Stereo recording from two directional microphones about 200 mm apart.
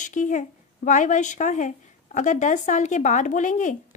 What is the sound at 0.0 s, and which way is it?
Speech, 40° left (ahead or behind).